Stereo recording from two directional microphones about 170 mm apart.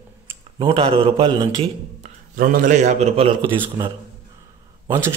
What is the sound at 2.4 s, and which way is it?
A man's voice, 50° right (ahead or behind).